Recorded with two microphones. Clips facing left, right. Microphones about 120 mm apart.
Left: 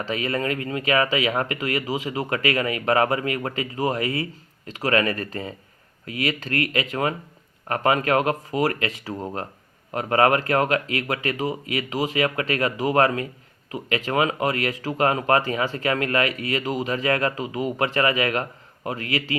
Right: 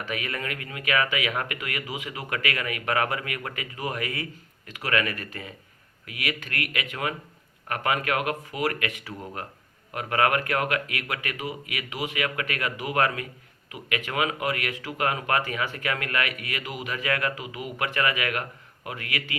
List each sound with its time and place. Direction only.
0.0 s speech: 30° left (ahead or behind)